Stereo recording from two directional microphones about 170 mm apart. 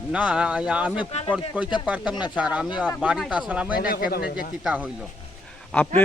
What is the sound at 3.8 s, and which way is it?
Speech, 60° left (ahead or behind).